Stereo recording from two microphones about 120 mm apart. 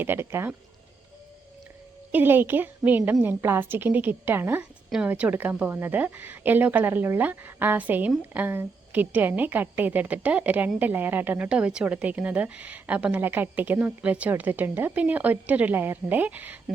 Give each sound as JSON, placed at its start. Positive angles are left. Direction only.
{"t": 0.0, "sound": "speech", "side_deg": -20}
{"t": 2.1, "sound": "a woman's voice", "side_deg": -15}